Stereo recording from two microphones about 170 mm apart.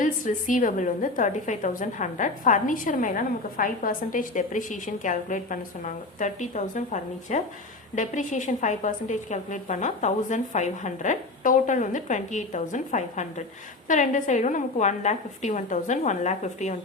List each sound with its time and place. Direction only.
0.0 s a woman's voice: 50° left (ahead or behind)